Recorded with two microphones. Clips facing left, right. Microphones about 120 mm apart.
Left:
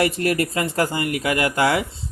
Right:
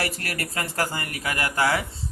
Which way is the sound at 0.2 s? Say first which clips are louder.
Left 13 dB; 45° right (ahead or behind).